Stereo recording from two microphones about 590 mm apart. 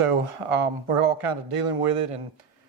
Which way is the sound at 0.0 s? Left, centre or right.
Right.